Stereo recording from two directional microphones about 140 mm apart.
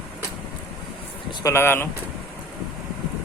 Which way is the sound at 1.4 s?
15° left (ahead or behind).